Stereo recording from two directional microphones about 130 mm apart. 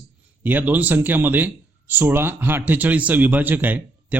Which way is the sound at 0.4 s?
15° right (ahead or behind).